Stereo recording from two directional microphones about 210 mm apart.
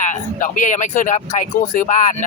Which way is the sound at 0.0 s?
35° left (ahead or behind).